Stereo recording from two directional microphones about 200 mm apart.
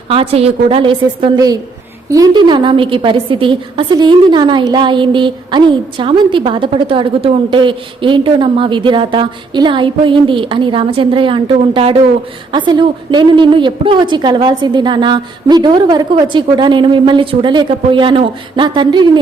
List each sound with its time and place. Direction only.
0.1 s a woman's voice: 30° right (ahead or behind)